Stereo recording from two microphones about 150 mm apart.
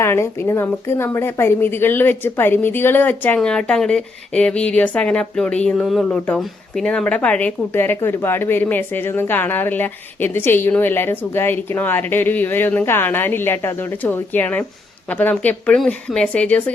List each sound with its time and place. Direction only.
0.0 s speech: 15° left (ahead or behind)